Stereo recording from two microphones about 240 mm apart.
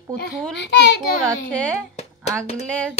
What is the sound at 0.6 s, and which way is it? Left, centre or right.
Speech, left.